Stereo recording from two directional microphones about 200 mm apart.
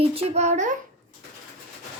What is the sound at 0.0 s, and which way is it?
Speech, 30° right (ahead or behind).